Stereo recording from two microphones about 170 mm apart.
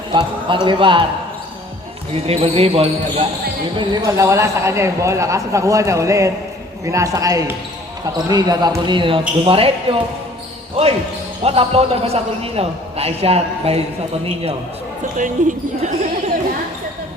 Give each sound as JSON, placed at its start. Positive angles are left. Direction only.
{"t": 0.1, "sound": "speech", "side_deg": -30}
{"t": 2.2, "sound": "a man's voice", "side_deg": -35}
{"t": 3.8, "sound": "a man's voice", "side_deg": -20}
{"t": 11.4, "sound": "a man's voice", "side_deg": -35}
{"t": 15.2, "sound": "speech", "side_deg": -50}